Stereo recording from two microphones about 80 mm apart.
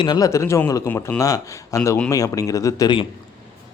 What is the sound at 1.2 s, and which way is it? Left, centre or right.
A man's voice, left.